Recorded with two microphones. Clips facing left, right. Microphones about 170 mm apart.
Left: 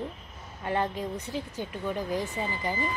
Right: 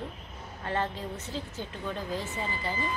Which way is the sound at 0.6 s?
15° left (ahead or behind).